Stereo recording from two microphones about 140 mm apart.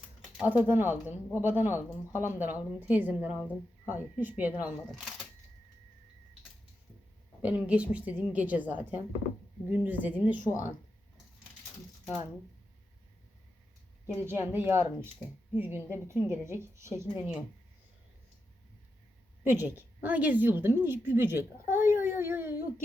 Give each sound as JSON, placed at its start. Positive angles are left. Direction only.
{"t": 0.4, "sound": "a woman's voice", "side_deg": -10}
{"t": 4.9, "sound": "speech", "side_deg": 0}
{"t": 7.4, "sound": "a woman's voice", "side_deg": -10}
{"t": 14.3, "sound": "a woman's voice", "side_deg": -15}
{"t": 19.5, "sound": "a woman's voice", "side_deg": -15}